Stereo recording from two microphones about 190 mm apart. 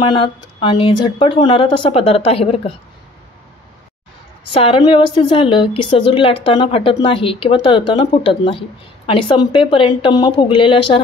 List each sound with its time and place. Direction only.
0.1 s a woman's voice: 25° left (ahead or behind)
4.5 s a woman's voice: 30° left (ahead or behind)